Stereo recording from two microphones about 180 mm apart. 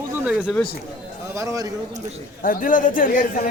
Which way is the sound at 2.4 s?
50° left (ahead or behind).